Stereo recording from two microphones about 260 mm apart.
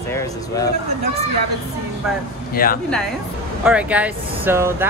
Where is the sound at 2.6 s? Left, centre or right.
Left.